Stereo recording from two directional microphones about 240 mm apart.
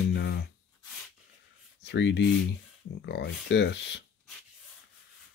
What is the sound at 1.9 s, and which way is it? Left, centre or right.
Speech, left.